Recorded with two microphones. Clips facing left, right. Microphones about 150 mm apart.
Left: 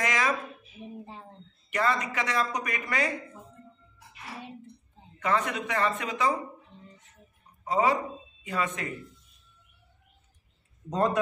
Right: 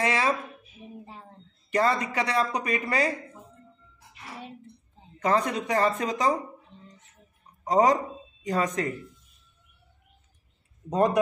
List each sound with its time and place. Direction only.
0.0 s speech: 30° right (ahead or behind)
1.7 s speech: 35° right (ahead or behind)
5.2 s speech: 35° right (ahead or behind)
7.6 s speech: 40° right (ahead or behind)
10.9 s speech: 15° right (ahead or behind)